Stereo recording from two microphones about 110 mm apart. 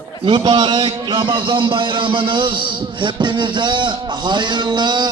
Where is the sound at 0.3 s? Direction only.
45° right (ahead or behind).